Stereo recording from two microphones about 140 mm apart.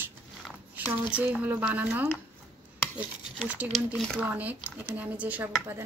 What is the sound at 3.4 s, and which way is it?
A woman's voice, 10° right (ahead or behind).